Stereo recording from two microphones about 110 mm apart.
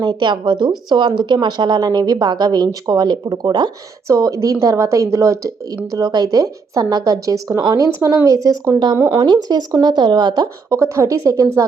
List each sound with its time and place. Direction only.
0.0 s speech: 45° right (ahead or behind)
9.1 s speech: 40° right (ahead or behind)
10.7 s speech: 25° right (ahead or behind)